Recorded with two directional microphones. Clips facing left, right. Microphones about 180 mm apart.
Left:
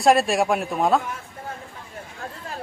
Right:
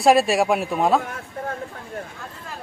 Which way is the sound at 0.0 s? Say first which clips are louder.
Right 2 dB; centre (ahead or behind).